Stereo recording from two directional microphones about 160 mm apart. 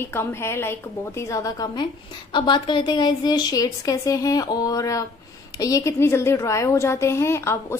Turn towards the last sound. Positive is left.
turn(degrees=15)  # may be behind; listen again after turning